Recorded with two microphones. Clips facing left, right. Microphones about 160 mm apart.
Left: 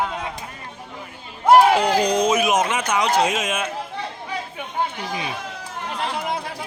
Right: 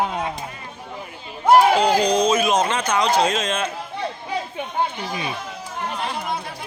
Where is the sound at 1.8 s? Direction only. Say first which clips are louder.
Right 1 dB; 20° right (ahead or behind).